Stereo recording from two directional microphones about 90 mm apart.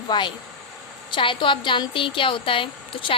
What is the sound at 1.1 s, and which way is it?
Speech, 65° left (ahead or behind).